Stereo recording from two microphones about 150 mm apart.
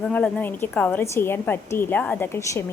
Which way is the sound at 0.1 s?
10° left (ahead or behind).